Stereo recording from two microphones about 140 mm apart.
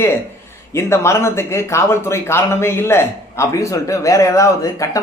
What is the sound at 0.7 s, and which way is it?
Speech, 20° left (ahead or behind).